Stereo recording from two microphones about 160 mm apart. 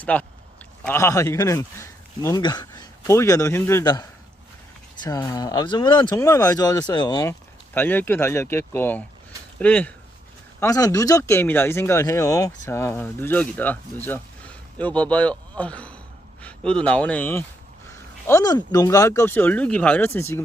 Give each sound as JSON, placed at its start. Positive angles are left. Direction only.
{"t": 0.0, "sound": "speech", "side_deg": 10}
{"t": 5.0, "sound": "speech", "side_deg": 20}
{"t": 7.7, "sound": "speech", "side_deg": 10}
{"t": 10.6, "sound": "speech", "side_deg": 20}
{"t": 18.3, "sound": "speech", "side_deg": 20}